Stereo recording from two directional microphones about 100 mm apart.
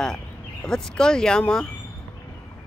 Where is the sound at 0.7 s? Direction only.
5° left (ahead or behind).